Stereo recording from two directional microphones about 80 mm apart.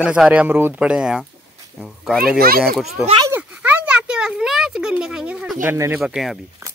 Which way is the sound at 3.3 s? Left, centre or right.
Right.